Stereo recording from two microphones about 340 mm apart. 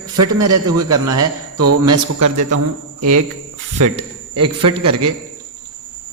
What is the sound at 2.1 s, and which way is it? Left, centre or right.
A man's voice, right.